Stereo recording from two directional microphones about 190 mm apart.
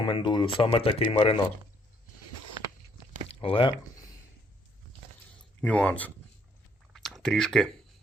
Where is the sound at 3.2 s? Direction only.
30° left (ahead or behind).